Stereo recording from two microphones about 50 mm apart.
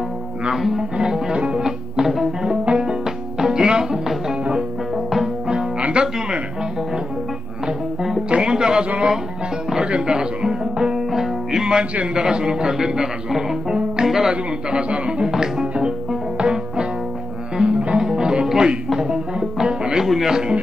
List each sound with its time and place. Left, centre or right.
0.5 s a man's voice: centre
1.6 s music: centre
4.9 s music: centre
5.8 s music: right
8.3 s a sound: centre
9.8 s music: centre
11.9 s a man's voice: right
14.3 s speech: centre
16.3 s music: centre
20.1 s a man's voice: centre